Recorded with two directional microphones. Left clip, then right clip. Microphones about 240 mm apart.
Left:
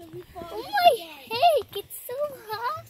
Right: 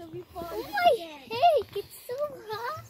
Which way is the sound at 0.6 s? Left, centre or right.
Left.